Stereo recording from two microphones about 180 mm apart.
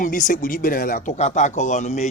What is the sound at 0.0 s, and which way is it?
A man's voice, 45° left (ahead or behind).